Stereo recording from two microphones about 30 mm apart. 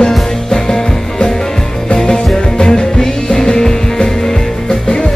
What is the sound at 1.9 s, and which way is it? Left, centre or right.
Music, left.